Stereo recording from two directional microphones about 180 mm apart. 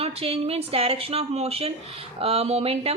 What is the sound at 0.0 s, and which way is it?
A woman's voice, 35° right (ahead or behind).